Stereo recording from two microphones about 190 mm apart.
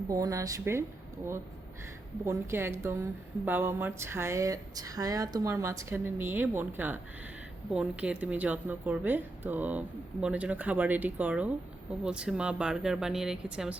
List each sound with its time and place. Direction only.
0.1 s a woman's voice: 20° right (ahead or behind)